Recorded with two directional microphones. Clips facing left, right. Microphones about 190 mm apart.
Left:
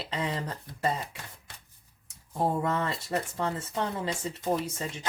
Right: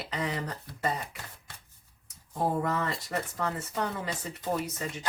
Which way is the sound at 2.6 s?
25° left (ahead or behind).